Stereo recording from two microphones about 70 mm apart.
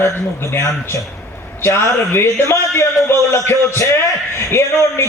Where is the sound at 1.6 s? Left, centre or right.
Left.